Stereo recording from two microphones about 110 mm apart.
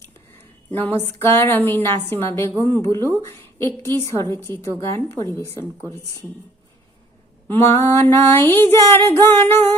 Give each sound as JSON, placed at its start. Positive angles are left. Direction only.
{"t": 0.7, "sound": "female singing", "side_deg": 20}
{"t": 3.2, "sound": "speech", "side_deg": 20}
{"t": 3.8, "sound": "female singing", "side_deg": 20}
{"t": 7.4, "sound": "female singing", "side_deg": 20}